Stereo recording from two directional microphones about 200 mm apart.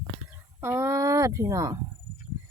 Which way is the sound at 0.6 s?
15° right (ahead or behind).